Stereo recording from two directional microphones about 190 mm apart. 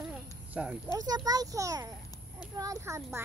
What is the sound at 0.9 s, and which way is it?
A child's voice, 20° right (ahead or behind).